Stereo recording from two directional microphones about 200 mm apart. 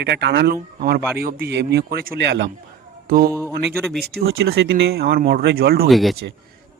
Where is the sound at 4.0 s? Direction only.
50° right (ahead or behind).